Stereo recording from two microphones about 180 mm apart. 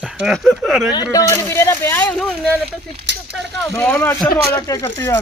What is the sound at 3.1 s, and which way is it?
Speech, 75° right (ahead or behind).